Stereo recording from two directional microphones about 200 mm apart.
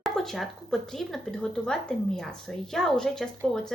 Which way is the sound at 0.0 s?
Centre (ahead or behind).